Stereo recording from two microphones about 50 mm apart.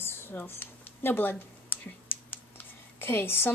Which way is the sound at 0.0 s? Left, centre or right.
Left.